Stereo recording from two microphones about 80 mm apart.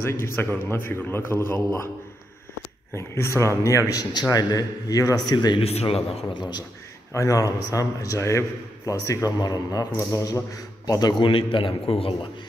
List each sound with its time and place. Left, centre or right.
0.0 s a man's voice: left
2.9 s a man's voice: left
5.3 s speech: left
7.1 s a man's voice: left
9.9 s a man's voice: left
11.1 s a man's voice: left